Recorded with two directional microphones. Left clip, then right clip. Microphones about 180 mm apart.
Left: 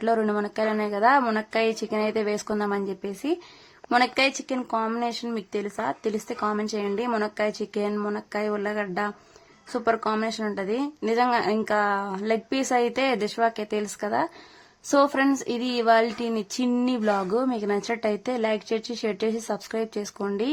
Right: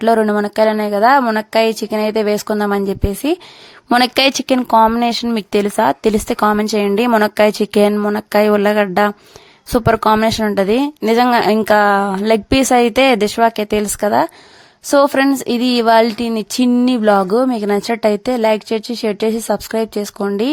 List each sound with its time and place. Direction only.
0.0 s speech: 40° right (ahead or behind)